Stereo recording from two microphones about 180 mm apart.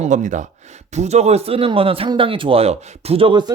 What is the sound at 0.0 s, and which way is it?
Speech, 45° right (ahead or behind).